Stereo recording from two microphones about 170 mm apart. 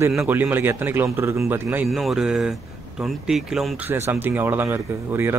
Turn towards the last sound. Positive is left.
turn(degrees=-10)  # may be behind; listen again after turning